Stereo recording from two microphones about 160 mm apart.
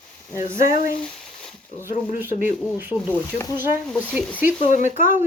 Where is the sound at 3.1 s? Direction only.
10° left (ahead or behind).